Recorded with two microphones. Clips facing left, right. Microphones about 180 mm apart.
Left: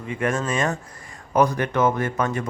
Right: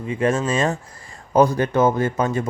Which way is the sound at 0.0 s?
25° right (ahead or behind).